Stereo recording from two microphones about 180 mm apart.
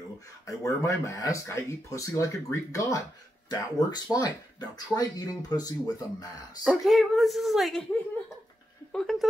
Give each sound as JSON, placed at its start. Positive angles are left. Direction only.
{"t": 0.5, "sound": "speech", "side_deg": 15}
{"t": 6.6, "sound": "speech", "side_deg": -5}
{"t": 8.9, "sound": "a sound", "side_deg": 5}